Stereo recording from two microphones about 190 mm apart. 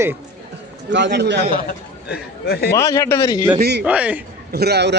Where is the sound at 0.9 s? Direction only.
70° right (ahead or behind).